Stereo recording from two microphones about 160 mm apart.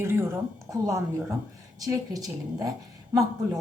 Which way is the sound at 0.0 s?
15° right (ahead or behind).